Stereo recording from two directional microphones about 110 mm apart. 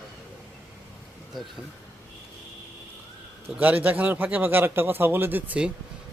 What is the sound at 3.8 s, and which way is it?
Speech, 15° right (ahead or behind).